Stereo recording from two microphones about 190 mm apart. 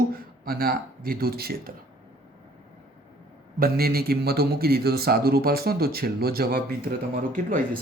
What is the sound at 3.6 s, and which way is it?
Speech, 55° right (ahead or behind).